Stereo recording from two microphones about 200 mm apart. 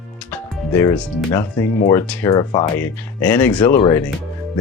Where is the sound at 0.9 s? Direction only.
5° left (ahead or behind).